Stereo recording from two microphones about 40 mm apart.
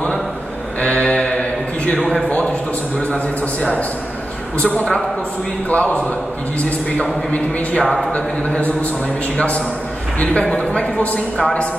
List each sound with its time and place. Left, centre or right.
0.7 s mantra: left
2.2 s a woman's voice: left
5.7 s speech: left
7.8 s speech: centre
10.1 s a woman's voice: left